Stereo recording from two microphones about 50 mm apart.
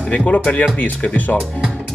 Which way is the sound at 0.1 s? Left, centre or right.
Left.